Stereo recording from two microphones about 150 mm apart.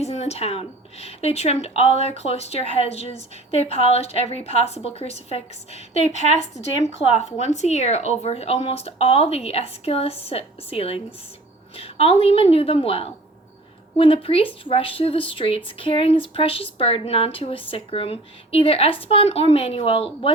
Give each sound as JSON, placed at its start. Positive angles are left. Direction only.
{"t": 0.0, "sound": "a woman's voice", "side_deg": 45}